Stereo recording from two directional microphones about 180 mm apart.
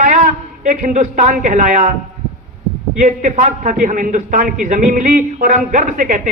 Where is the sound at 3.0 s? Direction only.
45° right (ahead or behind).